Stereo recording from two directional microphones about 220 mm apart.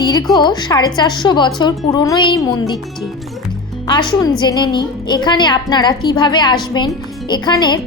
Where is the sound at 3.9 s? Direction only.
20° left (ahead or behind).